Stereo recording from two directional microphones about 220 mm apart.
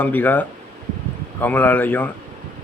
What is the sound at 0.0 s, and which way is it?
Speech, 10° left (ahead or behind).